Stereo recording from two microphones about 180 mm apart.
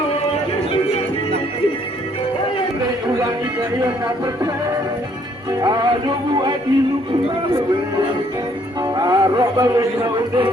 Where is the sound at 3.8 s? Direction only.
20° right (ahead or behind).